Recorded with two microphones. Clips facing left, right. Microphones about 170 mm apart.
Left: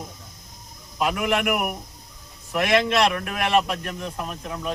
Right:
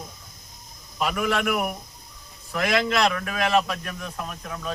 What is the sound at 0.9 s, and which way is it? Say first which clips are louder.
Speech: left 2 dB; 15° left (ahead or behind).